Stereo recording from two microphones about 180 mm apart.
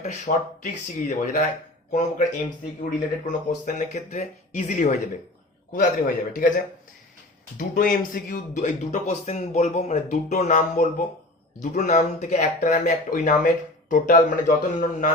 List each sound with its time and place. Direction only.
0.0 s speech: 40° left (ahead or behind)
3.2 s speech: 45° left (ahead or behind)
7.6 s speech: 50° left (ahead or behind)